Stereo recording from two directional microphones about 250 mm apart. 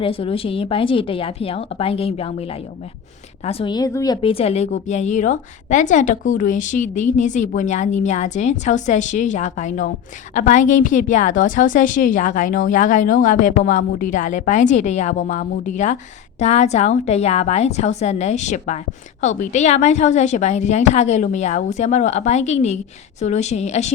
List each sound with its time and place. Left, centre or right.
0.0 s a woman's voice: left